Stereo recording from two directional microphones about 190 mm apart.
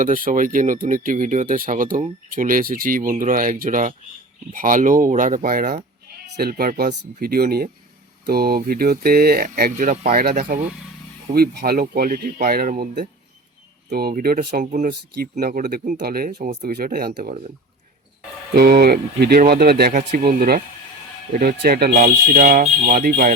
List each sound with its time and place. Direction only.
0.0 s speech: 45° right (ahead or behind)
10.2 s speech: 50° right (ahead or behind)
15.1 s speech: 55° right (ahead or behind)
16.7 s speech: 55° right (ahead or behind)
18.5 s speech: 55° right (ahead or behind)